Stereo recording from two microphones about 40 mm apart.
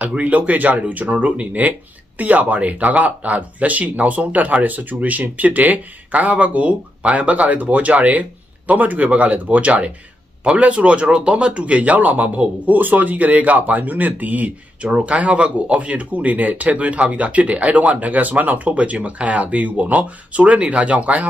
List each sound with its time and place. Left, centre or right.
0.0 s speech: right